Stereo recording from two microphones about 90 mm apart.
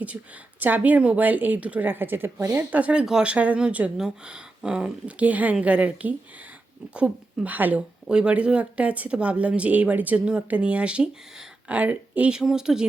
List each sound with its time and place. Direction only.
0.6 s speech: 20° right (ahead or behind)
2.6 s speech: 15° right (ahead or behind)